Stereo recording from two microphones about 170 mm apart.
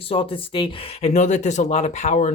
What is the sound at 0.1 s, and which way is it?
Speech, 30° left (ahead or behind).